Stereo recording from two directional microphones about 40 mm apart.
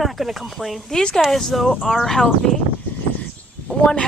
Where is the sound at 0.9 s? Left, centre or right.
Centre.